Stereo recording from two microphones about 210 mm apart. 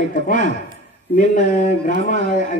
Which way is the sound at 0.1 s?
40° left (ahead or behind).